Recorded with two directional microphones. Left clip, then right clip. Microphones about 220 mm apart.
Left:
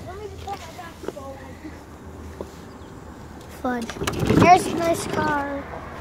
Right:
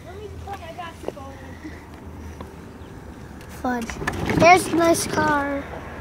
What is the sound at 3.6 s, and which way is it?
Speech, 25° right (ahead or behind).